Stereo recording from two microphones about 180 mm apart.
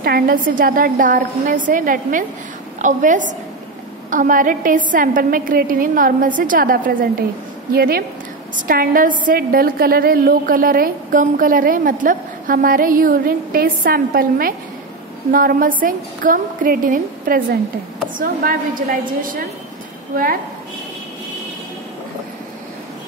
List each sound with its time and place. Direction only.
0.0 s a woman's voice: 55° right (ahead or behind)